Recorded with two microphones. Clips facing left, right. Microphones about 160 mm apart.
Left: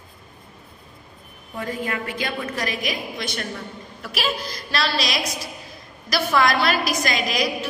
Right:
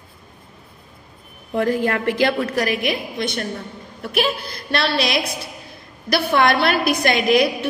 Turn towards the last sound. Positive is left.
turn(degrees=-60)  # may be behind; listen again after turning